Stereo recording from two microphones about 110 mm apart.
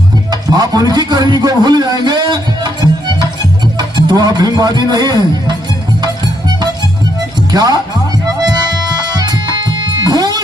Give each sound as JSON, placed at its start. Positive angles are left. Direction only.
{"t": 0.3, "sound": "music", "side_deg": -40}
{"t": 0.9, "sound": "a man's voice", "side_deg": -40}
{"t": 3.8, "sound": "speech", "side_deg": -40}
{"t": 7.5, "sound": "speech", "side_deg": -35}
{"t": 9.0, "sound": "music", "side_deg": -40}